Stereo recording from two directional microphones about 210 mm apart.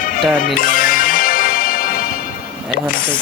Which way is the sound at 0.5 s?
40° left (ahead or behind).